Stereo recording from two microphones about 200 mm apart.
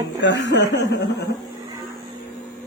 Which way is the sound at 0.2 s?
60° left (ahead or behind).